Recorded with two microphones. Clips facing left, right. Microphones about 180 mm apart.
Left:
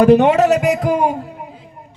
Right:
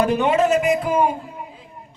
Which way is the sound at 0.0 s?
70° left (ahead or behind).